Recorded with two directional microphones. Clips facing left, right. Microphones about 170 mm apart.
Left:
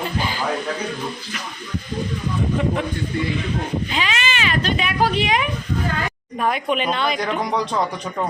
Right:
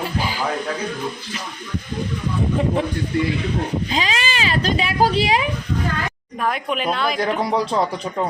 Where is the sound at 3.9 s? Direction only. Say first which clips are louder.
Right 1 dB; 35° right (ahead or behind).